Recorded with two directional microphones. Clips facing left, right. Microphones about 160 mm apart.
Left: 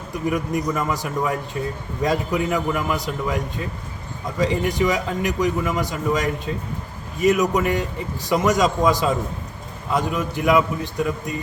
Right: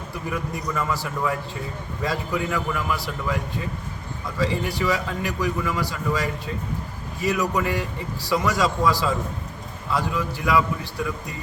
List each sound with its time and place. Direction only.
0.1 s a man's voice: 20° left (ahead or behind)
4.4 s a man's voice: 20° left (ahead or behind)